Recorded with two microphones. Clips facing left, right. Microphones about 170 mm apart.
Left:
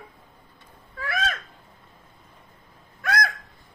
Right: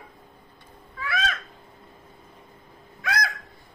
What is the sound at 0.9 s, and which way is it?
Owl, 45° left (ahead or behind).